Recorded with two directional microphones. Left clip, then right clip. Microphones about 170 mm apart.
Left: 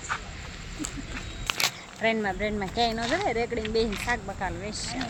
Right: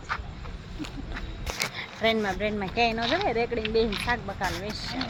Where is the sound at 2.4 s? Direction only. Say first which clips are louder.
Right 2 dB; 5° left (ahead or behind).